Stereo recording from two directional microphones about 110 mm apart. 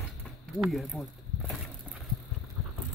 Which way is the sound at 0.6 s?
Centre (ahead or behind).